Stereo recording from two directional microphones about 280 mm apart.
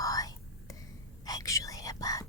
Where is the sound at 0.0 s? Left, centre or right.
Centre.